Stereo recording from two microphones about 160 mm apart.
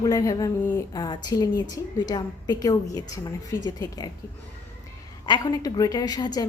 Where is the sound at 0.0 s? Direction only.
20° left (ahead or behind).